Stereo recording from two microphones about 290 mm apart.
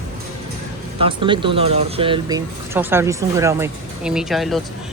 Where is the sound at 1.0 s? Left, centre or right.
Centre.